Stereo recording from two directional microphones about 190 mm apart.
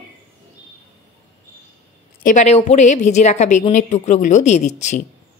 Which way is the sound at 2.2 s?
40° left (ahead or behind).